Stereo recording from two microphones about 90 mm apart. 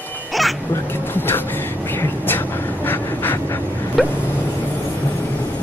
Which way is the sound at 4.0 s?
Centre (ahead or behind).